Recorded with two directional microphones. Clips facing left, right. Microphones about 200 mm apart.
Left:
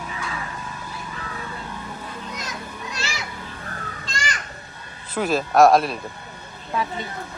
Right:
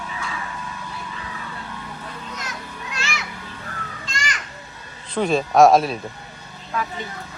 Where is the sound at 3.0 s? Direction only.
35° left (ahead or behind).